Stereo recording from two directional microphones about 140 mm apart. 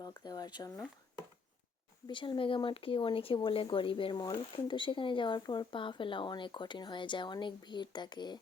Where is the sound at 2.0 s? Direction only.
35° left (ahead or behind).